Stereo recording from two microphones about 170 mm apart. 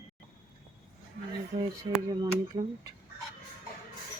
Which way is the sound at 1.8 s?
20° right (ahead or behind).